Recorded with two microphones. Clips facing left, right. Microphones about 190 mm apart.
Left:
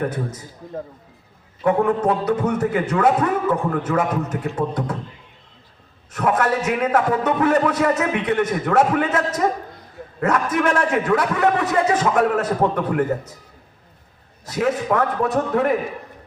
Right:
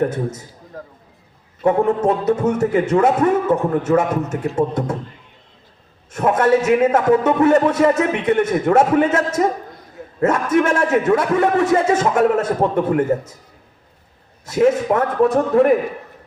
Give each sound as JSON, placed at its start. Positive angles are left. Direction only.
{"t": 0.1, "sound": "a man's voice", "side_deg": -25}
{"t": 1.6, "sound": "a man's voice", "side_deg": -25}
{"t": 6.1, "sound": "a man's voice", "side_deg": -25}
{"t": 14.5, "sound": "a man's voice", "side_deg": -25}